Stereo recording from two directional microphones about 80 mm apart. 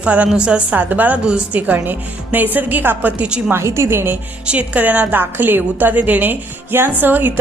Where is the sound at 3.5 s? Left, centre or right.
Right.